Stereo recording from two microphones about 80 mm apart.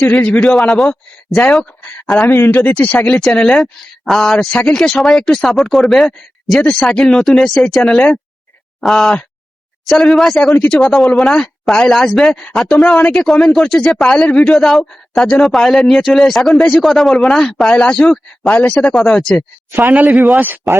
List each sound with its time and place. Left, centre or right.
0.0 s speech: centre
2.6 s speech: centre
10.6 s speech: centre
10.8 s speech: centre
18.8 s speech: centre
19.8 s speech: right